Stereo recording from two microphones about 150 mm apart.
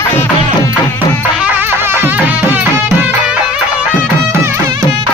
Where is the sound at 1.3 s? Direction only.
10° right (ahead or behind).